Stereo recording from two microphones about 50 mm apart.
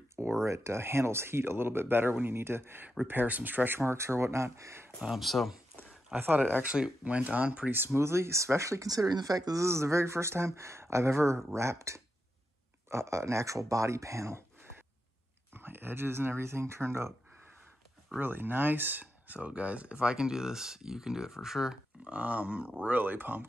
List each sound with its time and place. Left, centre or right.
0.4 s speech: right
3.1 s speech: right
3.8 s speech: right
5.1 s speech: centre
6.1 s speech: right
6.6 s speech: right
7.7 s speech: right
15.5 s speech: right
18.2 s speech: right; by 22.1 s centre
22.1 s speech: right
22.8 s speech: right